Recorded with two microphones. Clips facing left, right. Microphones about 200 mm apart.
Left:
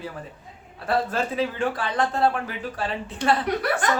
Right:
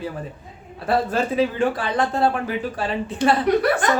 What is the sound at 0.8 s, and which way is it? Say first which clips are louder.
A man's voice: right 3 dB; 10° right (ahead or behind).